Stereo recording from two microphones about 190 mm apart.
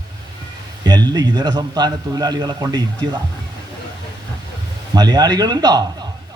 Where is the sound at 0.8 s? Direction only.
20° right (ahead or behind).